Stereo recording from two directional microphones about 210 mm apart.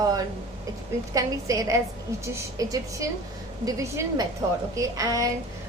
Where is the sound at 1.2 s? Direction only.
15° right (ahead or behind).